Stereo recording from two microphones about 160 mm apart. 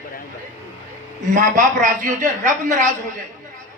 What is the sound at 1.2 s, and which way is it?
A man's voice, 50° right (ahead or behind).